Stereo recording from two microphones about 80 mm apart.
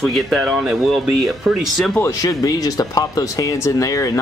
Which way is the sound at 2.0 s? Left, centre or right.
Left.